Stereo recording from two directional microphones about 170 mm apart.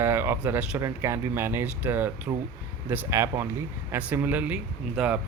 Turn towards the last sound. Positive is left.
turn(degrees=-5)  # may be behind; listen again after turning